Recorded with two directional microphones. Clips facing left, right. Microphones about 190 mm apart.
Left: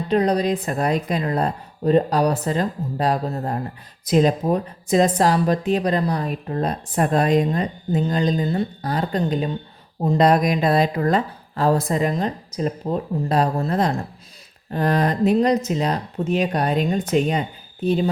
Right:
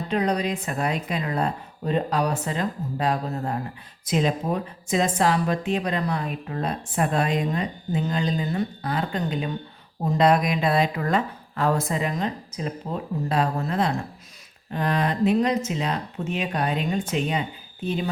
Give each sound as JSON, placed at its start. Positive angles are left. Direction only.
{"t": 0.1, "sound": "a woman's voice", "side_deg": 35}